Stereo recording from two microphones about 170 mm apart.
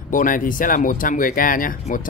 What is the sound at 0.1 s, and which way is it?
Speech, 50° left (ahead or behind).